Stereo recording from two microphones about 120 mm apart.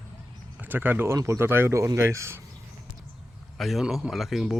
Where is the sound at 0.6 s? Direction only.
15° right (ahead or behind).